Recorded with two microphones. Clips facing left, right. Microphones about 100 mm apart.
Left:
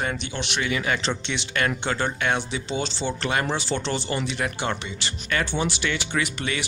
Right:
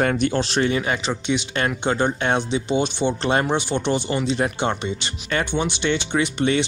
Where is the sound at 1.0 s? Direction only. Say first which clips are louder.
Right 5 dB; 15° right (ahead or behind).